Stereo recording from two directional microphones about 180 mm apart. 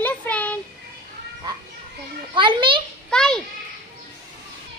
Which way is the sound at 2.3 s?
25° right (ahead or behind).